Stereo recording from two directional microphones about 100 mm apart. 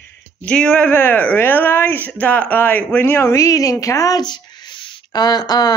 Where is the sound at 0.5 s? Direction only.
10° left (ahead or behind).